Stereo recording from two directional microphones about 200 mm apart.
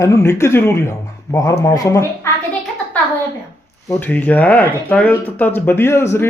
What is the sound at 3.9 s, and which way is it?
Speech, 10° left (ahead or behind).